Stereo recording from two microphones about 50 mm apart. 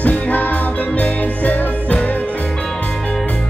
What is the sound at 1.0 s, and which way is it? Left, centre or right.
Music, left.